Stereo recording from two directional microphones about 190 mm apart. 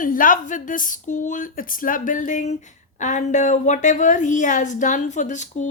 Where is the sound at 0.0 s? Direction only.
45° left (ahead or behind).